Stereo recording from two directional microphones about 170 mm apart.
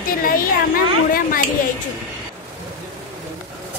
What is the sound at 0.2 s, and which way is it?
Speech, 55° left (ahead or behind).